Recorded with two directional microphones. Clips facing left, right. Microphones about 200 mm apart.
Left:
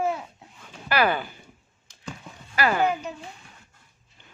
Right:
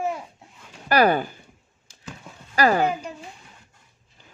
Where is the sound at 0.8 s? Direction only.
40° right (ahead or behind).